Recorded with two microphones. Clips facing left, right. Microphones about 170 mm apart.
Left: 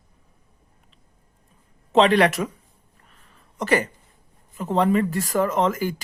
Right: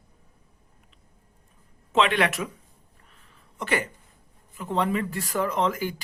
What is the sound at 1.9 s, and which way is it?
Speech, 35° left (ahead or behind).